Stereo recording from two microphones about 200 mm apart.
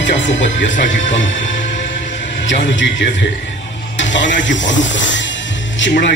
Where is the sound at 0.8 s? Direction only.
65° left (ahead or behind).